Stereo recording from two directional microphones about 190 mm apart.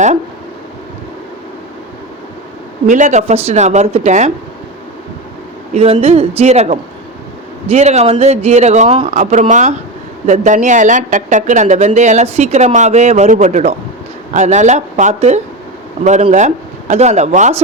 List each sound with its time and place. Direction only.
2.8 s speech: 40° right (ahead or behind)
5.7 s speech: 30° right (ahead or behind)